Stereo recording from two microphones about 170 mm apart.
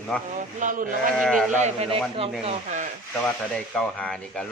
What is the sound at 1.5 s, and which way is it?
A man's voice, 40° right (ahead or behind).